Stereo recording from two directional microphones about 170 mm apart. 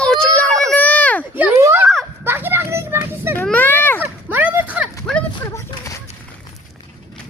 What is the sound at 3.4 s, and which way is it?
Children playing, 10° left (ahead or behind).